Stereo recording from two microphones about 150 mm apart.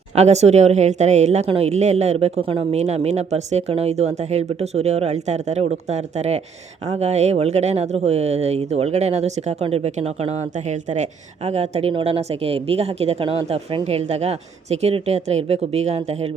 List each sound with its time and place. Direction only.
0.2 s speech: 45° right (ahead or behind)